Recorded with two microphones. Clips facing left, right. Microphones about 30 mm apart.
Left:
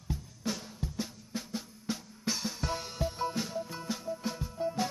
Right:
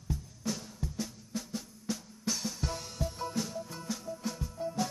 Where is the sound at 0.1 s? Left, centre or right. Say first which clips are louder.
Even; left.